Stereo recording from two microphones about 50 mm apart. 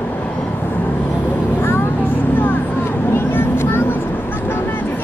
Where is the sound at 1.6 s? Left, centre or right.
Left.